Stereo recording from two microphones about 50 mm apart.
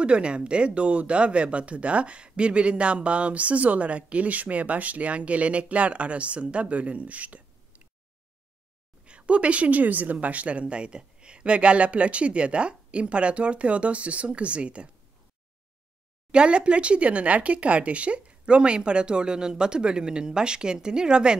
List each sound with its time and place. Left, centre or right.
0.0 s speech: right
9.0 s a woman's voice: right
16.3 s speech: right